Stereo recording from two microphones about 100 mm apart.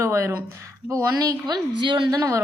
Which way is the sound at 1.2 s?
40° right (ahead or behind).